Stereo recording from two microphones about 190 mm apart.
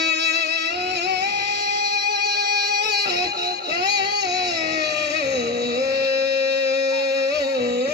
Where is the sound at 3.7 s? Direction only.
65° right (ahead or behind).